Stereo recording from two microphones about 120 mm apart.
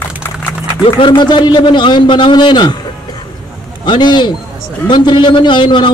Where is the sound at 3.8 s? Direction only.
40° left (ahead or behind).